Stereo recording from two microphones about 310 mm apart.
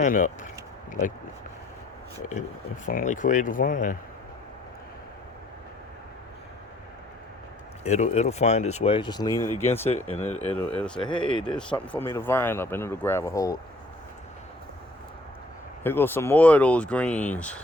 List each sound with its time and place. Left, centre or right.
0.0 s speech: left
2.8 s speech: left
7.9 s speech: left
10.2 s speech: left
10.6 s speech: centre
15.8 s speech: centre